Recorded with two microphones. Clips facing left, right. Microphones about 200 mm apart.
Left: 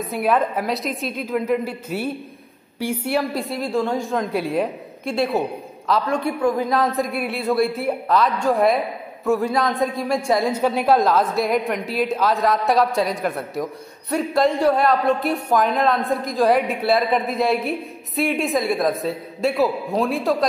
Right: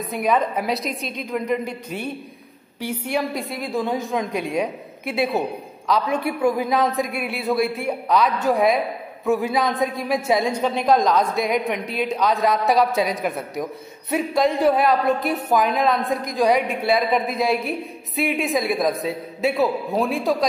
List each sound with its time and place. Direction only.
0.0 s speech: centre (ahead or behind)